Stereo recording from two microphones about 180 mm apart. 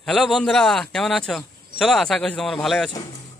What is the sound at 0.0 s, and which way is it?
A man's voice, centre (ahead or behind).